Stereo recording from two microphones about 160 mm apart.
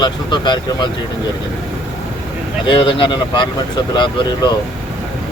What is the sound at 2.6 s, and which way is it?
Speech, 30° left (ahead or behind).